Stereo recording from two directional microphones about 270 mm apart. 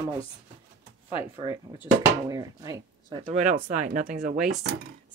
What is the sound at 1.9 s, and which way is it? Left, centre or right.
Speech, centre.